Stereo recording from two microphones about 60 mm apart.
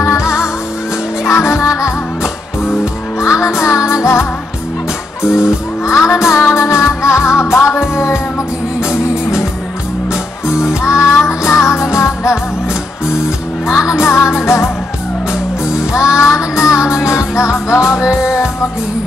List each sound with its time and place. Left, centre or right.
0.0 s music: left
5.9 s music: left
10.7 s music: centre
11.0 s music: left
14.0 s music: left
15.8 s music: centre
16.2 s child singing: left
17.4 s music: left
17.9 s music: centre